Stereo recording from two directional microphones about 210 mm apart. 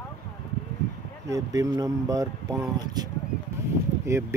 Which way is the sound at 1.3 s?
15° right (ahead or behind).